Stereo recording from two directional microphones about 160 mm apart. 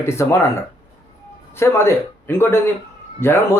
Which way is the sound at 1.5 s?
15° left (ahead or behind).